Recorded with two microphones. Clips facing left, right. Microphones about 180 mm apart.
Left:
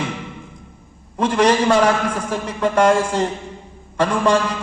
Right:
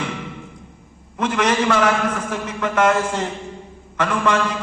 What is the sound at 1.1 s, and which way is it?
A man's voice, 35° left (ahead or behind).